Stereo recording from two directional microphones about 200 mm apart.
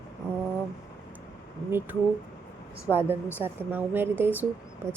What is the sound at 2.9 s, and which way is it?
Speech, 10° right (ahead or behind).